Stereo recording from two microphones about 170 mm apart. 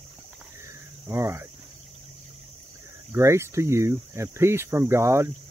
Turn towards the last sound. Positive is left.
turn(degrees=-15)  # may be behind; listen again after turning